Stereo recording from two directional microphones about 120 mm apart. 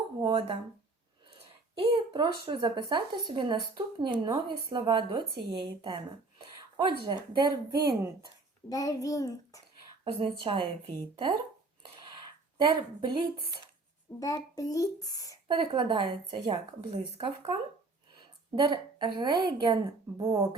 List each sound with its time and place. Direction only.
0.3 s speech: 45° right (ahead or behind)
1.8 s speech: 45° right (ahead or behind)
8.7 s a child's voice: 30° left (ahead or behind)
10.0 s speech: 45° right (ahead or behind)
11.9 s a sound: 40° right (ahead or behind)
14.2 s a child's voice: 30° left (ahead or behind)
15.4 s speech: 45° right (ahead or behind)
18.7 s speech: 40° right (ahead or behind)